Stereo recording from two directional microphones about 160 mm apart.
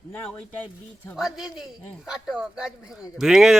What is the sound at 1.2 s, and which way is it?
Speech, centre (ahead or behind).